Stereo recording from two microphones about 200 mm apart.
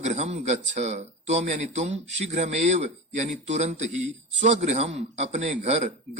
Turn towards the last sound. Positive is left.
turn(degrees=-35)  # may be behind; listen again after turning